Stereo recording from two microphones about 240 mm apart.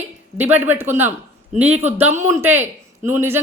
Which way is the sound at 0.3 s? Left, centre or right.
Centre.